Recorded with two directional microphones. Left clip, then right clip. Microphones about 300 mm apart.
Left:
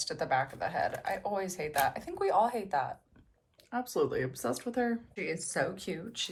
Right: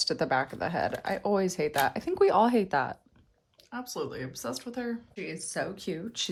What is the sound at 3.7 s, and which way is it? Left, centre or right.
Speech, centre.